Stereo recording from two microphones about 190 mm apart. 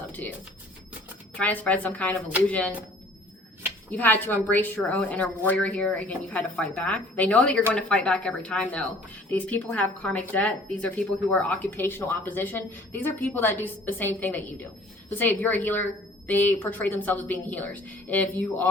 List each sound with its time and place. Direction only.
0.1 s a sound: 10° left (ahead or behind)
1.4 s speech: 10° left (ahead or behind)
3.9 s speech: 10° left (ahead or behind)